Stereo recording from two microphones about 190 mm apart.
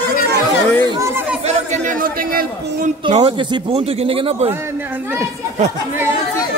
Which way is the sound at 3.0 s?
30° right (ahead or behind).